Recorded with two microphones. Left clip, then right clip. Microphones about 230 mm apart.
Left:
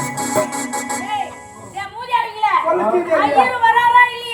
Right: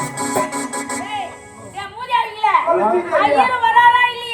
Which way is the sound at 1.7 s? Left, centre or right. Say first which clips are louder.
Even; centre.